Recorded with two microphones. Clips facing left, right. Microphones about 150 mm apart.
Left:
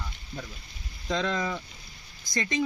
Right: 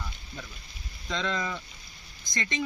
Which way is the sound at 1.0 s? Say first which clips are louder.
Left 3 dB; 10° left (ahead or behind).